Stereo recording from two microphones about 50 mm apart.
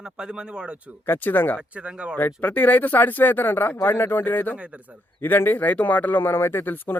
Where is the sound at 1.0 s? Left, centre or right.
Left.